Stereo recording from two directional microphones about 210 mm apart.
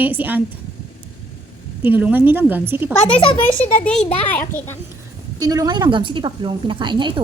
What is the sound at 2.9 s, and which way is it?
A woman's voice, 5° left (ahead or behind).